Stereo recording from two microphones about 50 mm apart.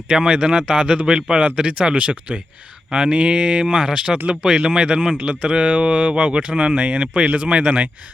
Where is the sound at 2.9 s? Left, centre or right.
Centre.